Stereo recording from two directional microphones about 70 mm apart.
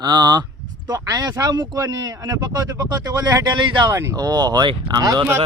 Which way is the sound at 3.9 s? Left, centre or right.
Right.